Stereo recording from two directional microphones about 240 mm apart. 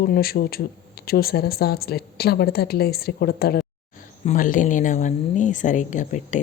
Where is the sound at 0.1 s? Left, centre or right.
Left.